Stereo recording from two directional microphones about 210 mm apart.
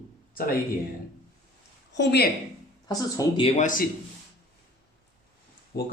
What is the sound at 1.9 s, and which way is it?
Speech, 55° left (ahead or behind).